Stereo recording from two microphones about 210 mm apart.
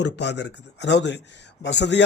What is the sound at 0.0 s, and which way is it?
Speech, 55° left (ahead or behind).